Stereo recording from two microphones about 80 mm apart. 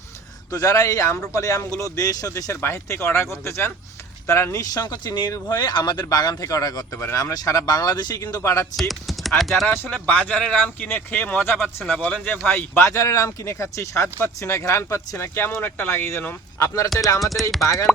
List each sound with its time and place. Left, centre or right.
0.5 s speech: left
4.6 s speech: left
5.5 s speech: left
6.9 s speech: left
7.2 s speech: left
8.7 s typing: centre
9.4 s speech: centre
9.9 s speech: left
12.9 s speech: left
16.6 s speech: left
17.2 s speech: centre
17.6 s speech: left